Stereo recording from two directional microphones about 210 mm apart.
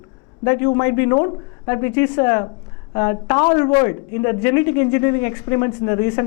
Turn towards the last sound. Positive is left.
turn(degrees=15)  # may be behind; listen again after turning